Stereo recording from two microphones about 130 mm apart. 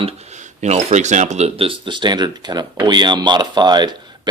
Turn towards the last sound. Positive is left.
turn(degrees=-35)  # may be behind; listen again after turning